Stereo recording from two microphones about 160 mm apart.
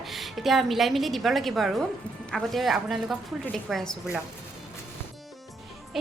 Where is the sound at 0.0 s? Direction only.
Centre (ahead or behind).